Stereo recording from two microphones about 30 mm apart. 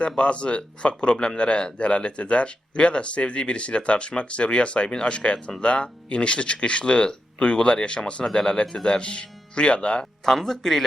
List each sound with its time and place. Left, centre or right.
0.0 s speech: left
10.2 s speech: centre